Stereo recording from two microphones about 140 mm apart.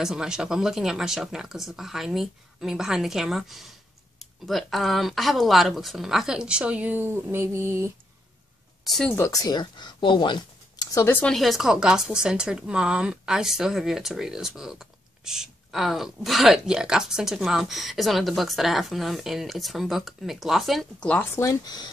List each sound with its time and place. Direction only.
0.0 s a woman's voice: 5° right (ahead or behind)
8.8 s speech: centre (ahead or behind)
9.1 s speech: 20° left (ahead or behind)
11.0 s speech: 15° left (ahead or behind)
11.3 s a woman's voice: centre (ahead or behind)
21.4 s speech: 25° left (ahead or behind)